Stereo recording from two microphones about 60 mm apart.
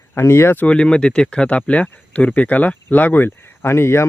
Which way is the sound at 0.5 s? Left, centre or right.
Left.